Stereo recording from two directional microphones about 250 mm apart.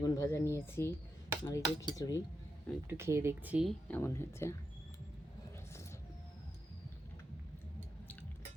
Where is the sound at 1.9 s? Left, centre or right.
Centre.